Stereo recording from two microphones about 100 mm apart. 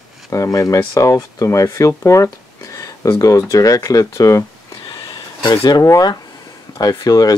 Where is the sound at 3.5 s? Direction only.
35° left (ahead or behind).